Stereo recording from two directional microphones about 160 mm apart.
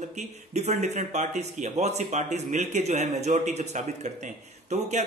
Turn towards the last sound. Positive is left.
turn(degrees=-45)  # may be behind; listen again after turning